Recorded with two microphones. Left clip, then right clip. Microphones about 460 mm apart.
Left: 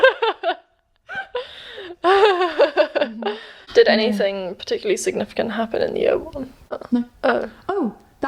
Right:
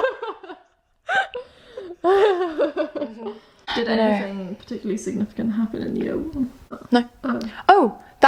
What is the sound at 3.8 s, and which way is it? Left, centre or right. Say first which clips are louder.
A woman's voice: left 3 dB; left.